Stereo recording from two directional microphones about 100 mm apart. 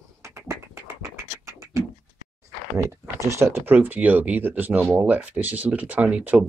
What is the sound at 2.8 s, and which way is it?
Speech, 30° right (ahead or behind).